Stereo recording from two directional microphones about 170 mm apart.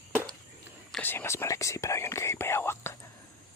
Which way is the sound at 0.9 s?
5° left (ahead or behind).